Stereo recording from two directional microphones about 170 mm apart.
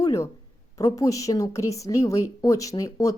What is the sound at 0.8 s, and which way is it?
A woman's voice, 20° left (ahead or behind).